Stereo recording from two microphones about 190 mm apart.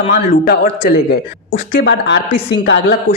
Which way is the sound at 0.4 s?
50° left (ahead or behind).